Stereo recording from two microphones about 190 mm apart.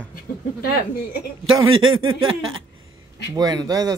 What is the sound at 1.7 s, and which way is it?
Speech, 90° right.